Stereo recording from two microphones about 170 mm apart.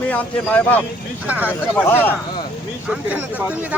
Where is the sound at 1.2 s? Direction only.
10° right (ahead or behind).